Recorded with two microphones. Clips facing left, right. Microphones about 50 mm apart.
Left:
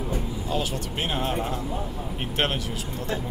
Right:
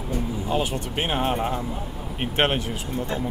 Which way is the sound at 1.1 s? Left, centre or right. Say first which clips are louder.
Right 4 dB; right.